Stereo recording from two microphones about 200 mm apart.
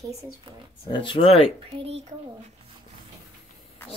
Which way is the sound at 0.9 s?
25° left (ahead or behind).